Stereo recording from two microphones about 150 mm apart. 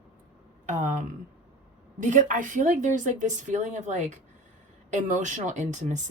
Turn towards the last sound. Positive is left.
turn(degrees=-55)  # may be behind; listen again after turning